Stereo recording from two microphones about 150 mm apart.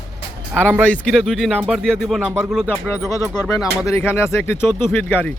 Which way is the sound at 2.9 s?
20° left (ahead or behind).